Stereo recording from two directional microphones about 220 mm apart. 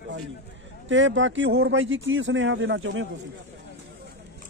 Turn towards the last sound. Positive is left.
turn(degrees=-60)  # may be behind; listen again after turning